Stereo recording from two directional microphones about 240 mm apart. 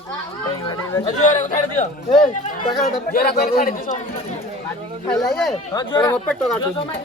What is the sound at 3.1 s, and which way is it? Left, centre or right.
Speech, left.